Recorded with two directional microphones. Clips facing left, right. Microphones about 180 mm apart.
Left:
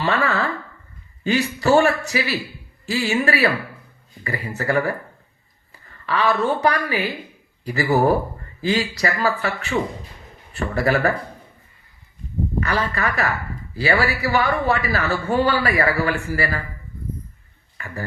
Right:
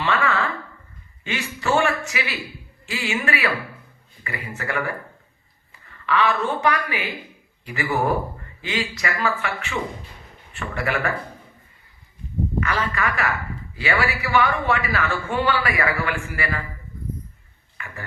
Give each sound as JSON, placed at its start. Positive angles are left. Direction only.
{"t": 0.0, "sound": "speech", "side_deg": 35}
{"t": 6.1, "sound": "speech", "side_deg": 35}
{"t": 12.5, "sound": "speech", "side_deg": 35}
{"t": 17.7, "sound": "speech", "side_deg": 40}